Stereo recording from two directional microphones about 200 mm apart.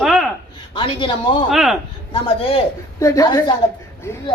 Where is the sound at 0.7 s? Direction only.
25° left (ahead or behind).